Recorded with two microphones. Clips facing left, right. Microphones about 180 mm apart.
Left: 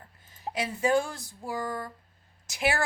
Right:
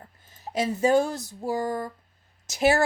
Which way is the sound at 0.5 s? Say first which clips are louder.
Right 5 dB; 40° right (ahead or behind).